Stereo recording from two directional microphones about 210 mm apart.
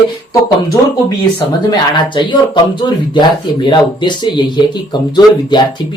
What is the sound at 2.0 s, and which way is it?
Speech, 20° left (ahead or behind).